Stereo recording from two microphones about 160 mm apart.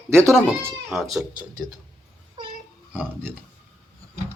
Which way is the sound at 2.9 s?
10° right (ahead or behind).